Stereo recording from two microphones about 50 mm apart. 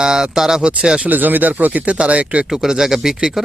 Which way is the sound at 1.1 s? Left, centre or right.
Right.